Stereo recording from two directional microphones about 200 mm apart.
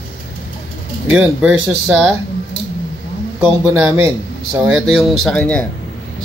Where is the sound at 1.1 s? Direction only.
5° right (ahead or behind).